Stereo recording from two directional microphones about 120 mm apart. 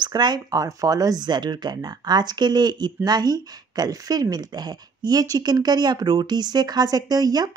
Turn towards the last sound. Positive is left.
turn(degrees=-35)  # may be behind; listen again after turning